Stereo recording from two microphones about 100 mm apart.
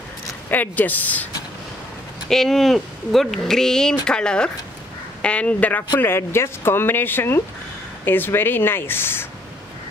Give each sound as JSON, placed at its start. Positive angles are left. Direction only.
{"t": 0.5, "sound": "speech", "side_deg": 15}
{"t": 2.2, "sound": "speech", "side_deg": 5}